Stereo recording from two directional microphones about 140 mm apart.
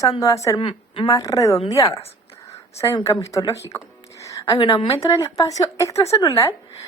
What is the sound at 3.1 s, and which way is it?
Speech, 20° left (ahead or behind).